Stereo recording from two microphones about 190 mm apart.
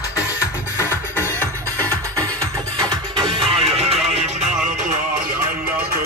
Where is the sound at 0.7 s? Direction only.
15° left (ahead or behind).